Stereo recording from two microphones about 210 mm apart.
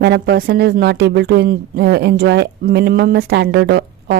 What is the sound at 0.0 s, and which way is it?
A woman's voice, 50° right (ahead or behind).